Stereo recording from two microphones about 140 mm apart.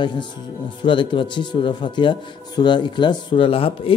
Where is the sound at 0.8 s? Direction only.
35° left (ahead or behind).